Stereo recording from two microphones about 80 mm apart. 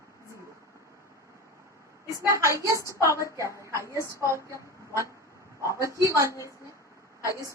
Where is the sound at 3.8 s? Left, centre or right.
Left.